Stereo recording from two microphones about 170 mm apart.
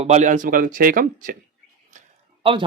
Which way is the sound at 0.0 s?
45° right (ahead or behind).